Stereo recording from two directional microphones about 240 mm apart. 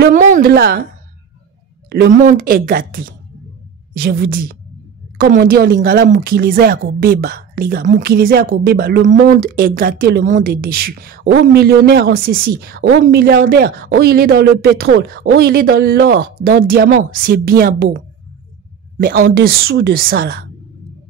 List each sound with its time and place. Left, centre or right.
0.0 s speech: right
1.9 s speech: right